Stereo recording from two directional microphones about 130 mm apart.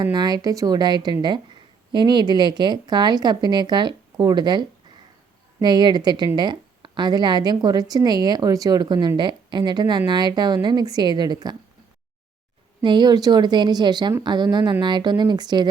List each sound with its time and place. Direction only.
0.0 s a woman's voice: 35° right (ahead or behind)
12.8 s a woman's voice: 35° right (ahead or behind)